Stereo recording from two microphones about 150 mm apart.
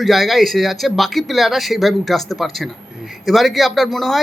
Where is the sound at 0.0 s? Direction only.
Centre (ahead or behind).